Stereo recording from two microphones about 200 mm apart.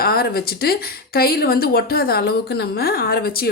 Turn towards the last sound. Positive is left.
turn(degrees=50)  # may be behind; listen again after turning